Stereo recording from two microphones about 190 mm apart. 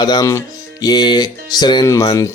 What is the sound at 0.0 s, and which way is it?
Speech, 20° left (ahead or behind).